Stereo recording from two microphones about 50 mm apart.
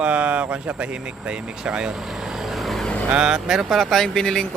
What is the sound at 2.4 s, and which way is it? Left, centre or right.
Vehicle, centre.